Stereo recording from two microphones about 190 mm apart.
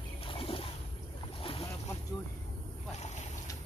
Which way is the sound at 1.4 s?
30° left (ahead or behind).